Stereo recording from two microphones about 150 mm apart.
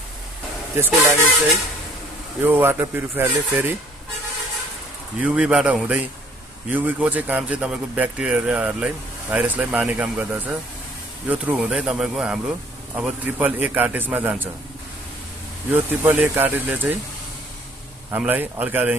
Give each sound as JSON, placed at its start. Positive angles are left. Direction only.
{"t": 0.7, "sound": "speech", "side_deg": -15}
{"t": 2.4, "sound": "speech", "side_deg": -15}
{"t": 5.2, "sound": "a man's voice", "side_deg": -5}
{"t": 15.7, "sound": "speech", "side_deg": -15}
{"t": 18.1, "sound": "speech", "side_deg": -10}